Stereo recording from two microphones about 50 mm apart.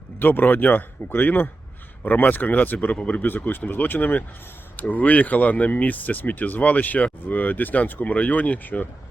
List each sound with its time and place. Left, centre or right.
0.2 s speech: left
3.2 s speech: left